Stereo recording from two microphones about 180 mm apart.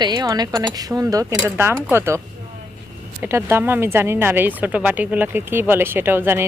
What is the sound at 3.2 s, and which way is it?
A woman's voice, 15° right (ahead or behind).